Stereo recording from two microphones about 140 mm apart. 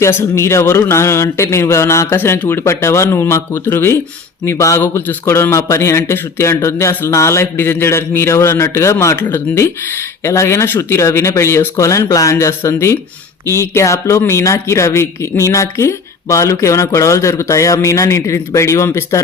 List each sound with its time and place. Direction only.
0.0 s a man's voice: 20° left (ahead or behind)